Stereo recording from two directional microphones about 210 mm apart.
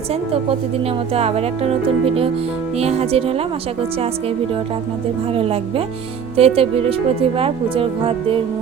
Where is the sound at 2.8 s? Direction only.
30° right (ahead or behind).